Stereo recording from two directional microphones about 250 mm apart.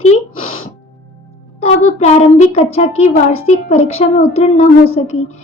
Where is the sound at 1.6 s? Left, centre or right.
Left.